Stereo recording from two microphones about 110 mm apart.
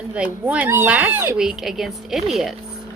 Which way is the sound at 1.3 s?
5° right (ahead or behind).